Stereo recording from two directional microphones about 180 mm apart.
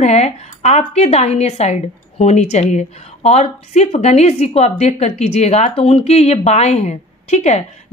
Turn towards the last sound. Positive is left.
turn(degrees=40)  # may be behind; listen again after turning